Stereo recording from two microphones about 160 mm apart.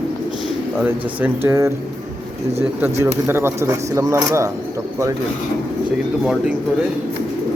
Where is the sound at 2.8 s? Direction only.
15° right (ahead or behind).